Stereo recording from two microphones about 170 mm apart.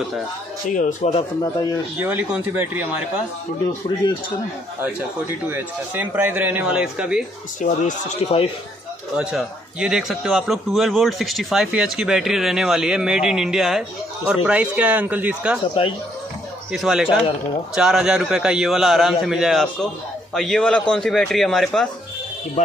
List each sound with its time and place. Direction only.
0.7 s speech: 50° left (ahead or behind)
1.4 s a man's voice: 20° left (ahead or behind)
2.0 s a man's voice: 10° right (ahead or behind)
4.8 s a man's voice: 10° right (ahead or behind)
7.6 s speech: 45° left (ahead or behind)
9.1 s a man's voice: 5° right (ahead or behind)
16.7 s a man's voice: 5° right (ahead or behind)